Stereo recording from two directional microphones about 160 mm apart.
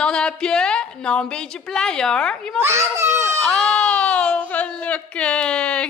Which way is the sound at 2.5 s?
15° right (ahead or behind).